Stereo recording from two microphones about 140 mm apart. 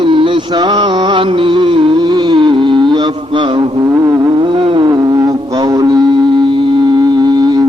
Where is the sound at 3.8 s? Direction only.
20° right (ahead or behind).